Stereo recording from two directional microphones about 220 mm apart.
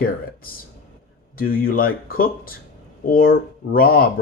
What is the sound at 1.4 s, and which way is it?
Speech, 40° left (ahead or behind).